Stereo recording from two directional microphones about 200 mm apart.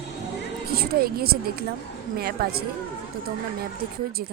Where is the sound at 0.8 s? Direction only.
50° right (ahead or behind).